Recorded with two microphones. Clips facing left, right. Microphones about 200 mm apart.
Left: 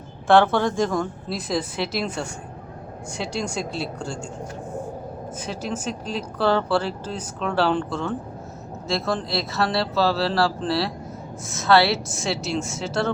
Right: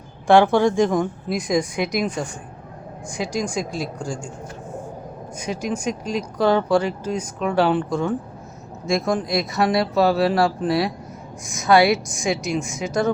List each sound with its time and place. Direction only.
0.3 s speech: 15° right (ahead or behind)
3.3 s speech: 10° right (ahead or behind)
5.4 s speech: 10° right (ahead or behind)